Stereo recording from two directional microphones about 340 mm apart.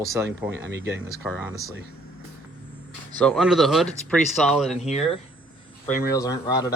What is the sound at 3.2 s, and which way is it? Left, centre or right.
Speech, centre.